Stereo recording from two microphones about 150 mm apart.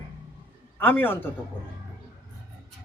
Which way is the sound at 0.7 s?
15° left (ahead or behind).